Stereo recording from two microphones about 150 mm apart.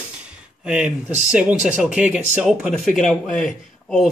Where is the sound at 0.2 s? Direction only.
5° right (ahead or behind).